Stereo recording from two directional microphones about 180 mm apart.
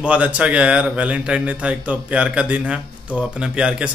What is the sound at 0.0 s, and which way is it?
A man's voice, 5° right (ahead or behind).